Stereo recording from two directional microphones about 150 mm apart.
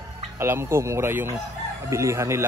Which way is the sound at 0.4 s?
15° right (ahead or behind).